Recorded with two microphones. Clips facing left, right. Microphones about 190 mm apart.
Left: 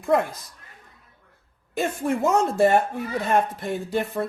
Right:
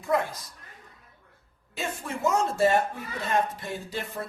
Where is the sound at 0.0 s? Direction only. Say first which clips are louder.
Left 5 dB; 55° left (ahead or behind).